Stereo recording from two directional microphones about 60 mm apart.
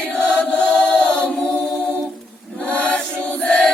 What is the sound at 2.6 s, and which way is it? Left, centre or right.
Choir, left.